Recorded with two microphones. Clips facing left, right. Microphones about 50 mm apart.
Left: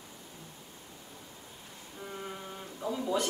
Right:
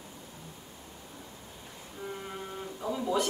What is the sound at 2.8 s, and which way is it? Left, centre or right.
Speech, centre.